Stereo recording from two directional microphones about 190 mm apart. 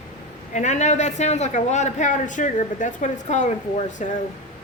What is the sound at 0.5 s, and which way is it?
A man's voice, 40° left (ahead or behind).